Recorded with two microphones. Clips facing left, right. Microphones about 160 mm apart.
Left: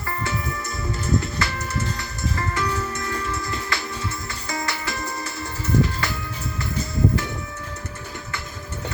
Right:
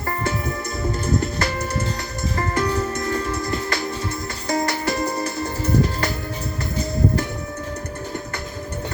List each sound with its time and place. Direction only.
0.1 s music: 40° right (ahead or behind)